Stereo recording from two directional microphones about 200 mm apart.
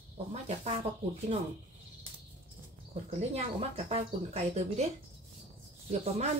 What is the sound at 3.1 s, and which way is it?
Speech, 30° right (ahead or behind).